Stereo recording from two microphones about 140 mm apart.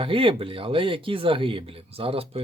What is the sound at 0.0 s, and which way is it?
Speech, 40° right (ahead or behind).